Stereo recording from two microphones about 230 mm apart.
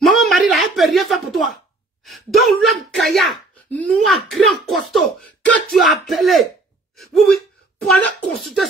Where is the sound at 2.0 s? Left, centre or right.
Centre.